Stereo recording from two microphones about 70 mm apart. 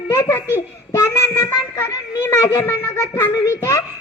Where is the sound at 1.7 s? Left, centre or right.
Left.